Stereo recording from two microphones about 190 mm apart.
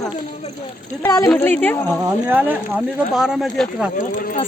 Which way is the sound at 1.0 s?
20° left (ahead or behind).